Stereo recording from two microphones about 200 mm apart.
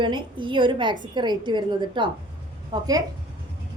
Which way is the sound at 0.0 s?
25° right (ahead or behind).